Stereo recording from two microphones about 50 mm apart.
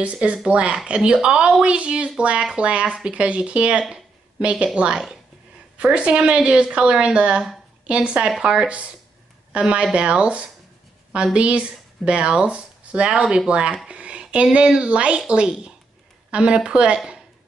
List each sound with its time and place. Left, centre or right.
0.0 s a woman's voice: right
3.9 s a sound: right
4.7 s a woman's voice: right